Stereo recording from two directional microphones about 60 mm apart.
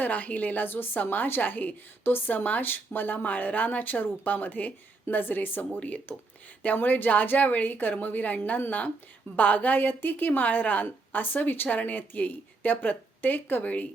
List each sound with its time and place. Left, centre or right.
0.0 s a woman's voice: left